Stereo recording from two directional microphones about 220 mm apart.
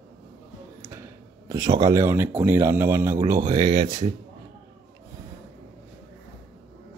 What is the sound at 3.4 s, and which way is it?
Speech, 25° right (ahead or behind).